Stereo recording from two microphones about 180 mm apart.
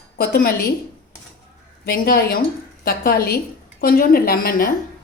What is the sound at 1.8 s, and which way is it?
A woman's voice, 55° left (ahead or behind).